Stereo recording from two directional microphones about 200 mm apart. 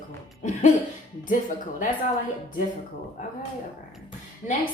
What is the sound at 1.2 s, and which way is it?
Speech, 40° left (ahead or behind).